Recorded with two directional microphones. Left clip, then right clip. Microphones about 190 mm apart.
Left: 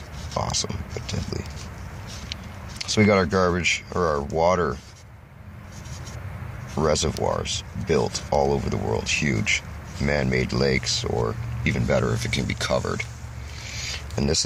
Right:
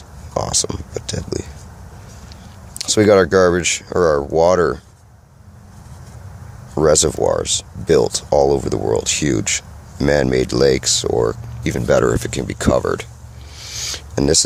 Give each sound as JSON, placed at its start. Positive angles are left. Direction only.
{"t": 0.3, "sound": "speech", "side_deg": -50}
{"t": 2.9, "sound": "speech", "side_deg": -55}
{"t": 6.7, "sound": "speech", "side_deg": -50}
{"t": 13.7, "sound": "a sound", "side_deg": -50}